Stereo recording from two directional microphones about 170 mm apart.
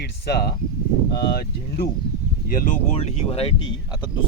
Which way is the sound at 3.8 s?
25° left (ahead or behind).